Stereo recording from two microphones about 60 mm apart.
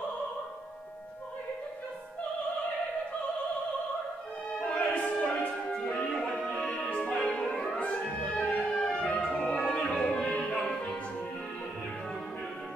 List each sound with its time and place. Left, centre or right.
4.6 s music: left
6.1 s music: centre